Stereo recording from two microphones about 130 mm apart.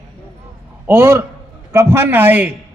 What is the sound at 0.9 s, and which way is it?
A man's voice, 20° right (ahead or behind).